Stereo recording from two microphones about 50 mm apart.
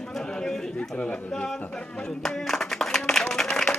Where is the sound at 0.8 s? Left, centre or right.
Left.